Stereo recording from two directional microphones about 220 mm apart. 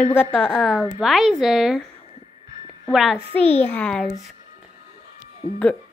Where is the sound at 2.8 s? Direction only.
Centre (ahead or behind).